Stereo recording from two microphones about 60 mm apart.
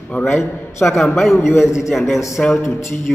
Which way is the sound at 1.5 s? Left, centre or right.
Left.